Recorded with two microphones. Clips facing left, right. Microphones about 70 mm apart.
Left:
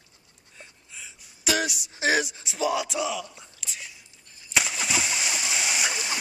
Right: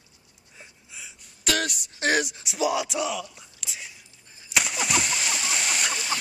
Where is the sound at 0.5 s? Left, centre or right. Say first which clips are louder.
Even; centre.